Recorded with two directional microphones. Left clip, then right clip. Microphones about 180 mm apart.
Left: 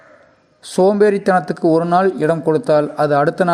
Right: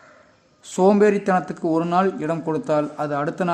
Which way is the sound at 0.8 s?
25° left (ahead or behind).